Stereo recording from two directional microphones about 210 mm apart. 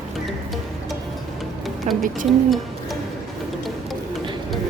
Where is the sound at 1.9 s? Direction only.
35° right (ahead or behind).